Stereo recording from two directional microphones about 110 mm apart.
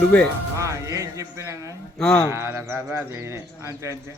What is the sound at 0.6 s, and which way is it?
Music, 30° right (ahead or behind).